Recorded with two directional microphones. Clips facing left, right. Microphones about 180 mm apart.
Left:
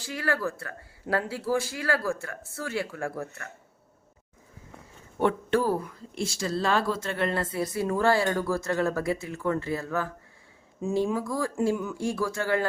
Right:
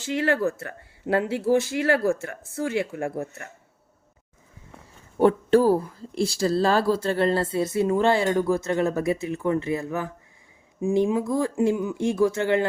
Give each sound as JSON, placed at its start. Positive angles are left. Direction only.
{"t": 0.0, "sound": "speech", "side_deg": -25}
{"t": 5.2, "sound": "speech", "side_deg": -35}